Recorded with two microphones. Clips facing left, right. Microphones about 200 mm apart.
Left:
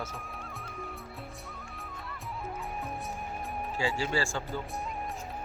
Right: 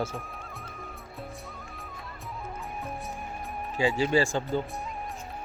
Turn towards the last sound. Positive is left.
turn(degrees=-20)  # may be behind; listen again after turning